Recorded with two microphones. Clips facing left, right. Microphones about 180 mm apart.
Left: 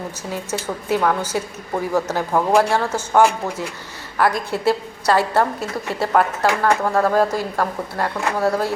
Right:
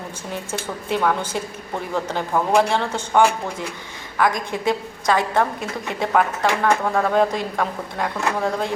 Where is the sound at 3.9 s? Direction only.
5° left (ahead or behind).